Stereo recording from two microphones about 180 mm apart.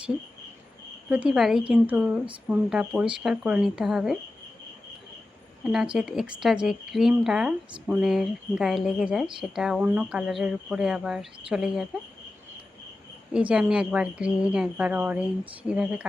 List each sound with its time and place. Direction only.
1.1 s speech: 5° right (ahead or behind)
5.7 s speech: 5° right (ahead or behind)
13.3 s speech: 5° right (ahead or behind)